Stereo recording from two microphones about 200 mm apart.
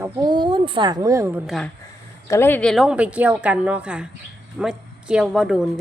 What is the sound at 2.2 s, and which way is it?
A woman's voice, 15° left (ahead or behind).